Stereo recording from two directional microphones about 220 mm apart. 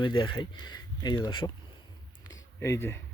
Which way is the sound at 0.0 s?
20° left (ahead or behind).